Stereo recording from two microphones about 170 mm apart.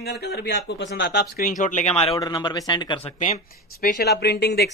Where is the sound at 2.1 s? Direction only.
25° left (ahead or behind).